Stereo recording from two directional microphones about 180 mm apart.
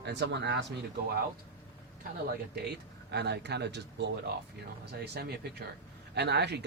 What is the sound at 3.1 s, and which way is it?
A man's voice, 70° right (ahead or behind).